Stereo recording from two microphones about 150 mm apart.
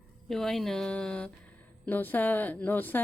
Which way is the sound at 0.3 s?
Centre (ahead or behind).